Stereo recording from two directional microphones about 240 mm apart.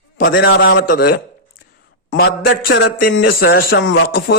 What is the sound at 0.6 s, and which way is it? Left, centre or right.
A man's voice, left.